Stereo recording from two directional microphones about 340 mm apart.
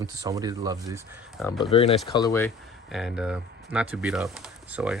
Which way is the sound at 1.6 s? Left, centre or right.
Centre.